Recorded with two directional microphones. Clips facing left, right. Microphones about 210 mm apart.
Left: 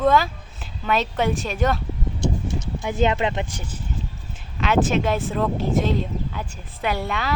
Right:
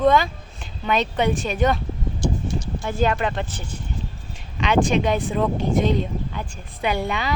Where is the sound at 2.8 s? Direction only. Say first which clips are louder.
Left 1 dB; 20° left (ahead or behind).